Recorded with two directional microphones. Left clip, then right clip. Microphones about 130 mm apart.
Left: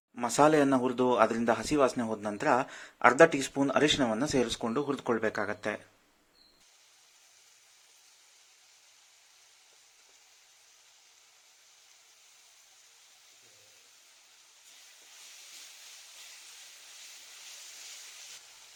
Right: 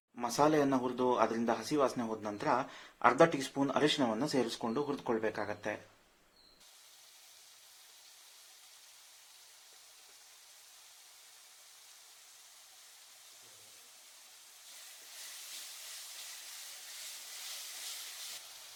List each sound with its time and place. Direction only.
0.2 s speech: 50° left (ahead or behind)